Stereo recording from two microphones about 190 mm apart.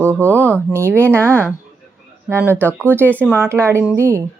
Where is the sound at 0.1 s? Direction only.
10° right (ahead or behind).